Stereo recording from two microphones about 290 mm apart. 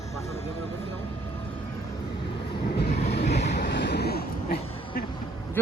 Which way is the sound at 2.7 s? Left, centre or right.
Left.